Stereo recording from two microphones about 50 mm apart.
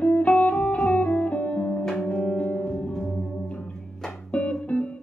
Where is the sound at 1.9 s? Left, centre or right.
Centre.